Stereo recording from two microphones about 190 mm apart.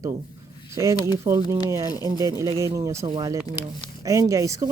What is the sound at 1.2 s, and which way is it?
A woman's voice, 15° right (ahead or behind).